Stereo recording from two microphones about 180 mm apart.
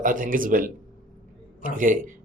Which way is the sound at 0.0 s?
50° right (ahead or behind).